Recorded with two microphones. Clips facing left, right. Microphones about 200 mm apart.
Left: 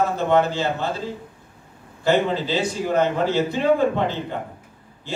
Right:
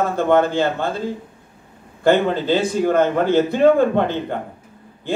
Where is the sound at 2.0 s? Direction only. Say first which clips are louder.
Right 4 dB; 55° right (ahead or behind).